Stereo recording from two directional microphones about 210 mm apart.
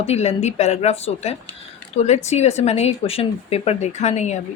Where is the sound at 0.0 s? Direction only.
30° left (ahead or behind).